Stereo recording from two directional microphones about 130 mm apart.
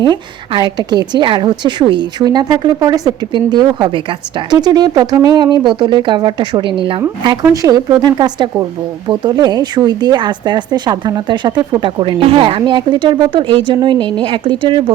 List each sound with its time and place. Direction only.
0.0 s a woman's voice: 35° right (ahead or behind)
7.3 s a woman's voice: 30° right (ahead or behind)